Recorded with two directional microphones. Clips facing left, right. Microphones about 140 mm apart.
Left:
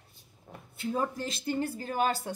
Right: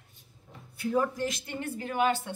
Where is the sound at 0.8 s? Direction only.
25° left (ahead or behind).